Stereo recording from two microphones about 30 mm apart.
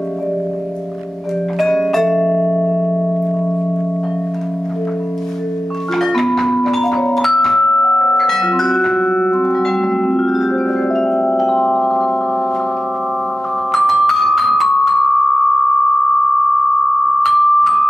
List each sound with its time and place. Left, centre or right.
1.6 s music: centre
2.4 s singing bowl: centre
5.9 s music: centre
7.8 s music: left
8.2 s music: centre
11.0 s music: centre
13.7 s music: centre; by 16.1 s left
17.2 s music: centre